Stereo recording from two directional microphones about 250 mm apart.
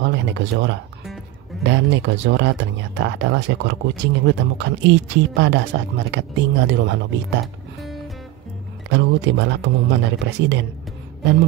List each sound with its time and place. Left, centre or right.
0.0 s speech: right
8.9 s speech: right